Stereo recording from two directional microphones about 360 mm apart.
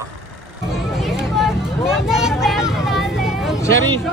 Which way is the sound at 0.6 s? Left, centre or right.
Centre.